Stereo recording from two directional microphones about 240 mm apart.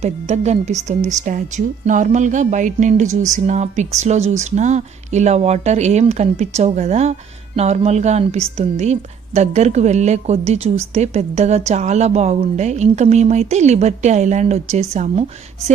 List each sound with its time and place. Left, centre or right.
0.0 s a woman's voice: right